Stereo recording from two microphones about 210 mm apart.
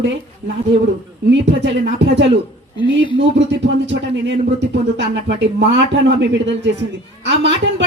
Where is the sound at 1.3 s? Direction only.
60° right (ahead or behind).